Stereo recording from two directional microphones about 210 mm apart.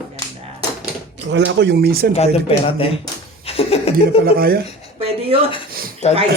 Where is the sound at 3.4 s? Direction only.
30° left (ahead or behind).